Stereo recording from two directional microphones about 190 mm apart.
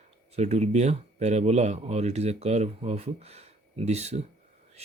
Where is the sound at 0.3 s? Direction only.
35° right (ahead or behind).